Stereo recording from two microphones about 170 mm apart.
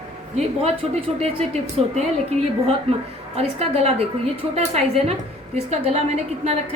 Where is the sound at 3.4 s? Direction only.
40° right (ahead or behind).